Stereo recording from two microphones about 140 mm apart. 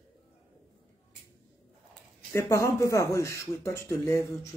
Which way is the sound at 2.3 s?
20° left (ahead or behind).